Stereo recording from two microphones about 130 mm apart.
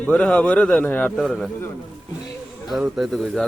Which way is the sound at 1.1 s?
Centre (ahead or behind).